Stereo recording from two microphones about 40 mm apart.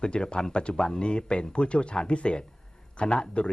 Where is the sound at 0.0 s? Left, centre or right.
Left.